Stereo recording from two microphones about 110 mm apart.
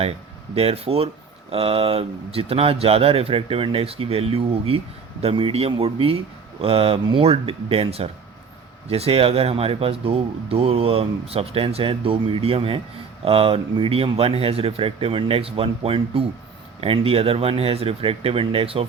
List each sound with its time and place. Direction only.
0.5 s speech: 65° right (ahead or behind)